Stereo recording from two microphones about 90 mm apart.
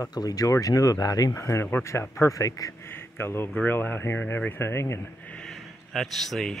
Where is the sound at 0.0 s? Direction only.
45° left (ahead or behind).